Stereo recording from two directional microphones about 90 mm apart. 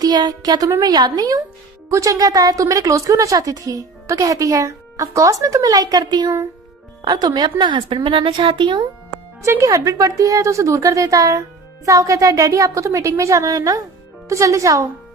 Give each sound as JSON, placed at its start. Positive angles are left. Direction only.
{"t": 0.0, "sound": "speech", "side_deg": -50}
{"t": 7.6, "sound": "a woman's voice", "side_deg": -65}
{"t": 9.4, "sound": "speech", "side_deg": -35}